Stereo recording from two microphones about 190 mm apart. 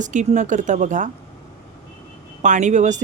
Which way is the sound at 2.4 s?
40° right (ahead or behind).